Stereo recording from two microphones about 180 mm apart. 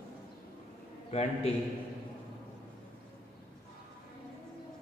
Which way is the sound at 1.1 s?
35° left (ahead or behind).